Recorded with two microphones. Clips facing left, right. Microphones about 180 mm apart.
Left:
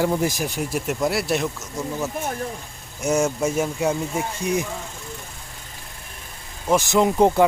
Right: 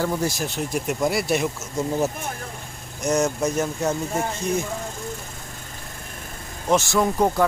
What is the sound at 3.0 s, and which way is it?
Speech, 5° left (ahead or behind).